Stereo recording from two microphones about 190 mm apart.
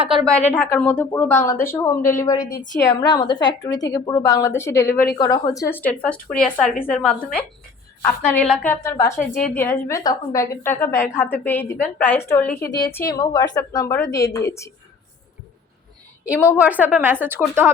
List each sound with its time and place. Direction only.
0.5 s a woman's voice: 10° left (ahead or behind)
5.7 s a woman's voice: 10° left (ahead or behind)
16.2 s a woman's voice: 10° right (ahead or behind)